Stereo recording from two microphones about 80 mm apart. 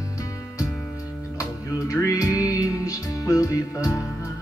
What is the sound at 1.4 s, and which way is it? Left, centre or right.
Music, left.